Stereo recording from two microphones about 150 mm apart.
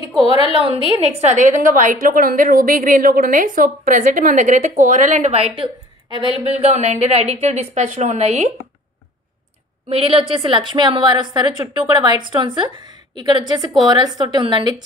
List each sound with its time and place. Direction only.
0.2 s a woman's voice: 40° left (ahead or behind)
1.2 s a woman's voice: 55° right (ahead or behind)
6.0 s a woman's voice: 35° right (ahead or behind)
6.6 s a woman's voice: 50° right (ahead or behind)
9.8 s a woman's voice: 40° right (ahead or behind)